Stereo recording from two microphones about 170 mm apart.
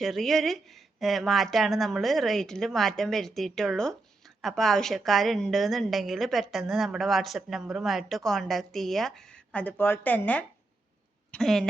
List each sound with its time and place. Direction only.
0.0 s a woman's voice: centre (ahead or behind)